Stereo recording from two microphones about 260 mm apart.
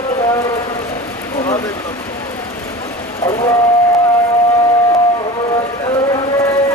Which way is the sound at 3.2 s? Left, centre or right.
Centre.